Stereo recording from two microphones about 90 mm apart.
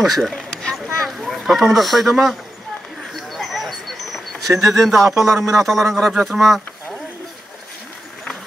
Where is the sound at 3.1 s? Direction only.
Centre (ahead or behind).